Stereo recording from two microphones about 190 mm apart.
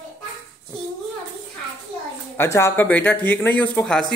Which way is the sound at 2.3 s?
15° left (ahead or behind).